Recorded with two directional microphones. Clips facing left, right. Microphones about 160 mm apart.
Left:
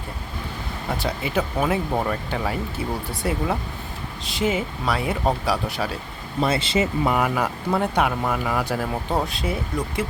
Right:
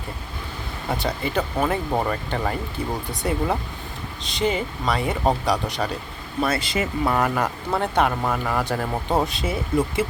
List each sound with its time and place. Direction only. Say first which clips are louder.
0.9 s speech: right 1 dB; 5° left (ahead or behind)
1.9 s speech: right 1 dB; 5° right (ahead or behind)
2.3 s speech: even; 5° left (ahead or behind)
6.4 s speech: left 2 dB; 25° left (ahead or behind)
7.1 s speech: even; 5° left (ahead or behind)